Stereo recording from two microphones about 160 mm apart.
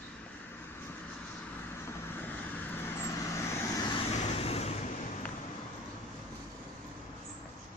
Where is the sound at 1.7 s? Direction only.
15° left (ahead or behind).